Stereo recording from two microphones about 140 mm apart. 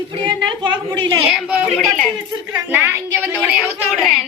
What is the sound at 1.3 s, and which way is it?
Speech, 5° right (ahead or behind).